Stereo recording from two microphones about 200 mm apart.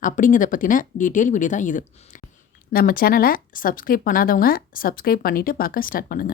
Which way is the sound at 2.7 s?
45° left (ahead or behind).